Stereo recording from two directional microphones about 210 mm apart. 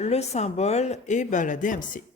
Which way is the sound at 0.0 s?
30° left (ahead or behind).